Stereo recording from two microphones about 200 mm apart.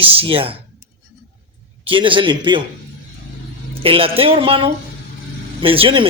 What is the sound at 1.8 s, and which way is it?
Speech, 25° right (ahead or behind).